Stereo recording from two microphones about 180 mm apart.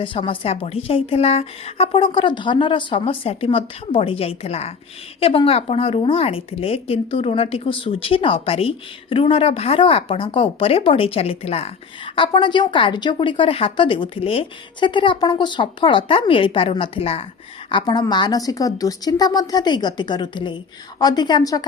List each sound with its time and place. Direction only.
0.0 s a woman's voice: 30° left (ahead or behind)